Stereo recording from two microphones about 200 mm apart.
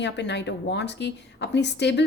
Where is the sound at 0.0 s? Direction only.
60° left (ahead or behind).